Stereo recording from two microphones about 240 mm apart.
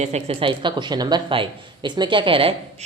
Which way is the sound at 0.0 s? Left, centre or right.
Right.